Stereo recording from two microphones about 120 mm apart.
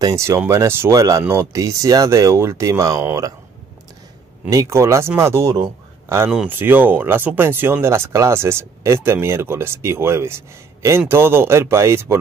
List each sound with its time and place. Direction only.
0.0 s speech: 25° right (ahead or behind)
4.5 s speech: 25° right (ahead or behind)